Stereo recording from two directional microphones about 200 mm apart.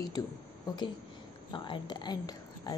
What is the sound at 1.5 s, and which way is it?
Speech, 25° left (ahead or behind).